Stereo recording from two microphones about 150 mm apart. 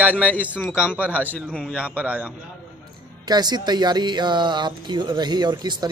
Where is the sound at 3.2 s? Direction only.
25° right (ahead or behind).